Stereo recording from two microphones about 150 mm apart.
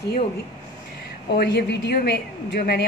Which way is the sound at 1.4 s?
90° left.